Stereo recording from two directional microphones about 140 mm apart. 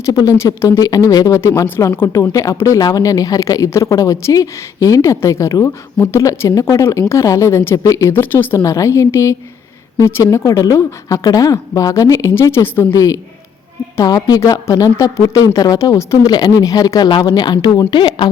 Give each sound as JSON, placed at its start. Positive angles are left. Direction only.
{"t": 0.0, "sound": "speech", "side_deg": 25}